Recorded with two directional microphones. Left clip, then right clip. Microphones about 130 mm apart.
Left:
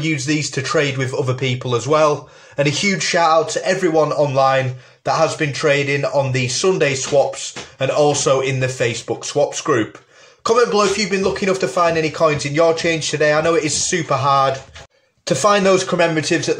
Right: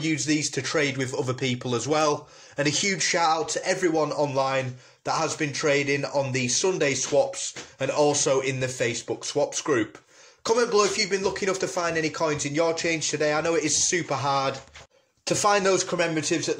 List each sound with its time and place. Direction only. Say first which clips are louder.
0.0 s speech: left 5 dB; 25° right (ahead or behind)